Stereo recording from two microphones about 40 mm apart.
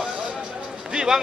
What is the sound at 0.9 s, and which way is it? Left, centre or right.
Speech, centre.